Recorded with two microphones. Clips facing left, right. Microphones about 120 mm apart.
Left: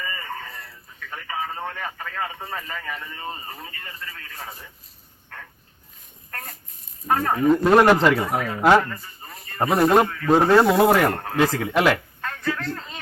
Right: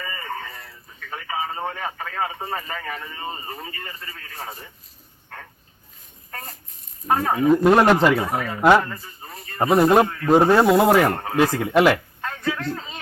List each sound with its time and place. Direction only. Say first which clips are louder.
0.0 s a sound: right 1 dB; 5° right (ahead or behind)
1.6 s a man's voice: right 3 dB; 5° right (ahead or behind)
2.6 s a man's voice: right 2 dB; 30° right (ahead or behind)
6.3 s a man's voice: right 1 dB; centre (ahead or behind)